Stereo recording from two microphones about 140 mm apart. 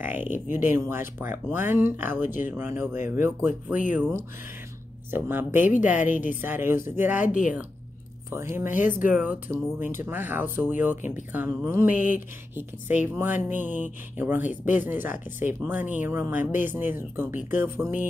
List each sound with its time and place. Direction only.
0.0 s speech: 15° right (ahead or behind)
2.2 s a woman's voice: 70° left (ahead or behind)
2.5 s speech: 15° right (ahead or behind)
5.1 s speech: 15° right (ahead or behind)
5.9 s a woman's voice: 65° left (ahead or behind)
6.4 s speech: 15° right (ahead or behind)
11.9 s a woman's voice: 65° left (ahead or behind)
12.5 s speech: 15° right (ahead or behind)